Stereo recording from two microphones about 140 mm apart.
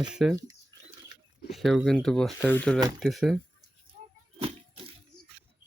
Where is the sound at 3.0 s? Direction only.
Centre (ahead or behind).